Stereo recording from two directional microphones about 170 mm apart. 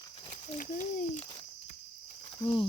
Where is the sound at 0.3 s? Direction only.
35° left (ahead or behind).